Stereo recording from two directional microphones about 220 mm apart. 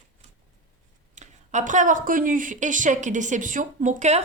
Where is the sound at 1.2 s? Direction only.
35° right (ahead or behind).